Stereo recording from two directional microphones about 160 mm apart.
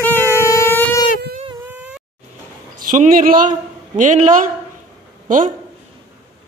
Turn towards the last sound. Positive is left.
turn(degrees=-55)  # may be behind; listen again after turning